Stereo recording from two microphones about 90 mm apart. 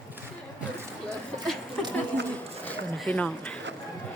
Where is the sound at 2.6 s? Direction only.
15° left (ahead or behind).